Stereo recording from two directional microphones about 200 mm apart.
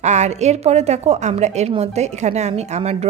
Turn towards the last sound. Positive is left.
turn(degrees=-35)  # may be behind; listen again after turning